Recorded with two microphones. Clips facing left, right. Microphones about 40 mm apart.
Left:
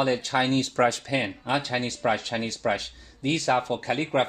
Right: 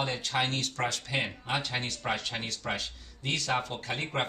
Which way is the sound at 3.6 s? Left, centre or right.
Left.